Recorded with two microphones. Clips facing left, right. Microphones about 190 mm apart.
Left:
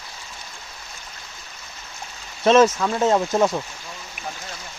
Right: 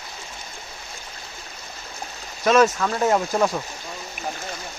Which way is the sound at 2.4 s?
25° left (ahead or behind).